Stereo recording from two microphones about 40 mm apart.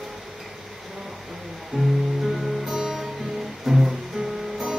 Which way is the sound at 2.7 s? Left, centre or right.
Centre.